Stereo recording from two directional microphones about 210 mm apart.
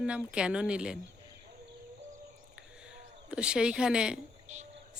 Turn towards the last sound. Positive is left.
turn(degrees=-35)  # may be behind; listen again after turning